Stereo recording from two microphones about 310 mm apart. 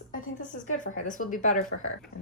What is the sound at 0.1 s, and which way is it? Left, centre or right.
Speech, left.